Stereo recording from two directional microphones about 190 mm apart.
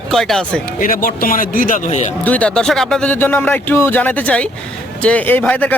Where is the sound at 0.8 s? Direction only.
45° left (ahead or behind).